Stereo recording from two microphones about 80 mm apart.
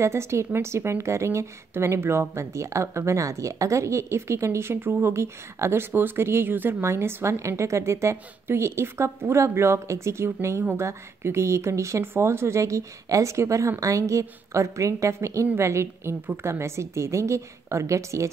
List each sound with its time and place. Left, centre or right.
0.0 s a woman's voice: right